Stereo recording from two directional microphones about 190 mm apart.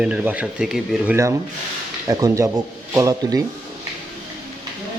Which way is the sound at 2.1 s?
15° right (ahead or behind).